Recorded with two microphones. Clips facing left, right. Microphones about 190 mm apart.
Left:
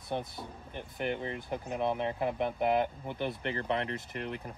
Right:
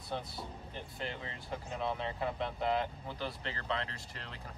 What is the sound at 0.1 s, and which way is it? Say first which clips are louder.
Speech: left 4 dB; 15° left (ahead or behind).